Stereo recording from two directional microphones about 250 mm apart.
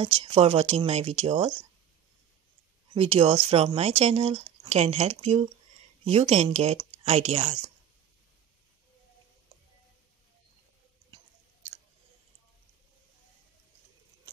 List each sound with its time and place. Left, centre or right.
0.0 s speech: right
2.9 s speech: right